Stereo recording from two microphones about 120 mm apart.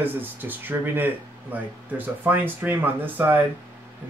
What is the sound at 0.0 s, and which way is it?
Speech, 15° right (ahead or behind).